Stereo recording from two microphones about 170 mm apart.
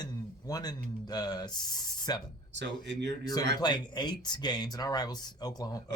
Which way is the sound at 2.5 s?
90° right.